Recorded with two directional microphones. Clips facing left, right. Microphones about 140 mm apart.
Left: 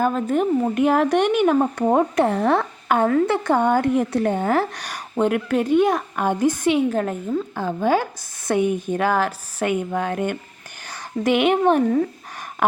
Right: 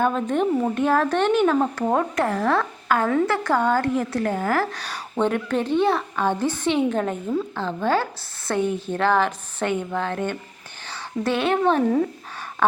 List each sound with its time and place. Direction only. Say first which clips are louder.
0.0 s a woman's voice: left 1 dB; 5° left (ahead or behind)